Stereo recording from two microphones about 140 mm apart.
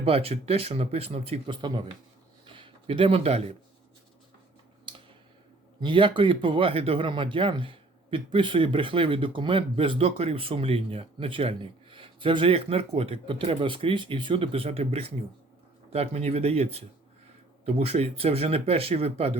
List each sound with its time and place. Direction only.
0.0 s speech: 45° right (ahead or behind)
2.5 s a sound: 35° right (ahead or behind)
5.8 s speech: 35° right (ahead or behind)